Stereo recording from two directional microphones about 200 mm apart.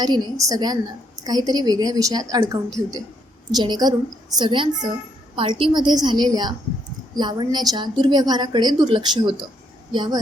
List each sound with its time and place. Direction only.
0.0 s a woman's voice: 20° right (ahead or behind)